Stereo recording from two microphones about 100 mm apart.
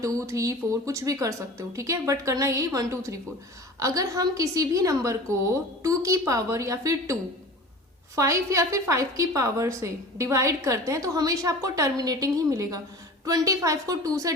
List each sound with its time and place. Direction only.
0.0 s a woman's voice: 35° right (ahead or behind)